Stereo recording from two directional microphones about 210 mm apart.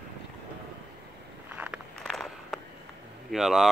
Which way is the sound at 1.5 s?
5° right (ahead or behind).